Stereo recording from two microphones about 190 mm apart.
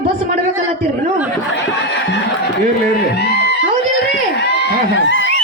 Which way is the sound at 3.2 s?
60° left (ahead or behind).